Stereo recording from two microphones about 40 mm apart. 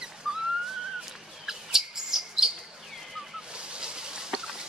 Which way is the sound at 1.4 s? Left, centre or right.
Centre.